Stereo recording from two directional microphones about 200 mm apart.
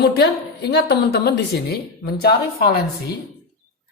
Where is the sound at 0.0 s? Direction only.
55° left (ahead or behind).